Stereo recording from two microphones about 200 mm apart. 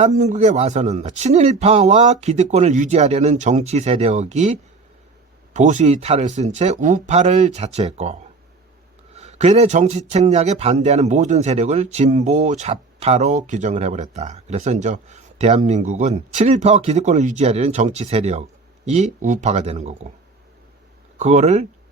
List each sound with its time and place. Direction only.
0.0 s speech: 35° right (ahead or behind)
5.5 s speech: 35° right (ahead or behind)
21.2 s speech: 35° right (ahead or behind)